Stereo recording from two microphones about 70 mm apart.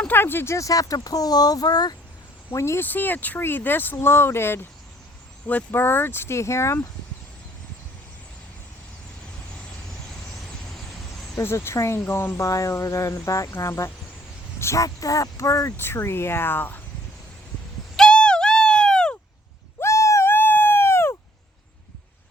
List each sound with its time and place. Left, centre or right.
0.1 s speech: left
0.5 s speech: left
2.5 s speech: left
2.8 s speech: left
5.5 s speech: left
5.8 s speech: left
11.3 s speech: left
12.0 s speech: left
12.4 s speech: left
14.8 s speech: left
15.8 s speech: left
17.9 s owl: centre
19.8 s a sound: left